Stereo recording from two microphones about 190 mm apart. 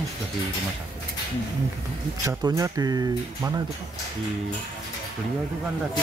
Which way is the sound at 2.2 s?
20° right (ahead or behind).